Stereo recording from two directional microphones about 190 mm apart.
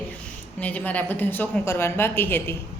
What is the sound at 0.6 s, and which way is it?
A woman's voice, 10° left (ahead or behind).